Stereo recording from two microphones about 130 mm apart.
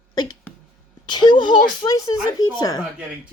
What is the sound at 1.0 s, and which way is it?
Speech, 35° left (ahead or behind).